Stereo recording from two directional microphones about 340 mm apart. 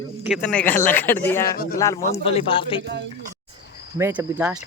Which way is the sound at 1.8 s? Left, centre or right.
Centre.